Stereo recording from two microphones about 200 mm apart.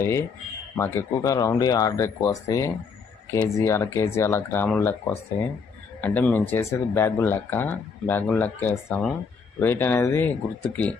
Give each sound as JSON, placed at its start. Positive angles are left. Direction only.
{"t": 0.0, "sound": "speech", "side_deg": 15}
{"t": 6.0, "sound": "speech", "side_deg": 10}